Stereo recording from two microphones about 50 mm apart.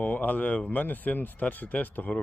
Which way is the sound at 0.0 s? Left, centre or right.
Left.